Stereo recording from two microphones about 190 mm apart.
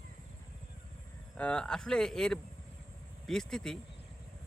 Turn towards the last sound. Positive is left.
turn(degrees=5)  # may be behind; listen again after turning